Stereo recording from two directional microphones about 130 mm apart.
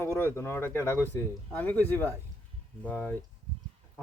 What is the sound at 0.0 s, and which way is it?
Speech, 15° left (ahead or behind).